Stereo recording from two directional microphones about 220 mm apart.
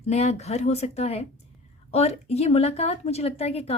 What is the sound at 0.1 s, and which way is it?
A woman's voice, 30° left (ahead or behind).